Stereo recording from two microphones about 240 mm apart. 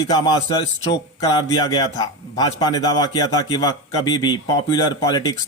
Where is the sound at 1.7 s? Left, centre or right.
Centre.